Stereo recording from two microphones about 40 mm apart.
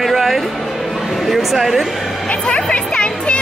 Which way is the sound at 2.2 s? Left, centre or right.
Left.